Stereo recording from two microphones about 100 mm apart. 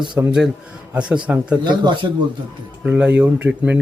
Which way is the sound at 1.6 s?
50° right (ahead or behind).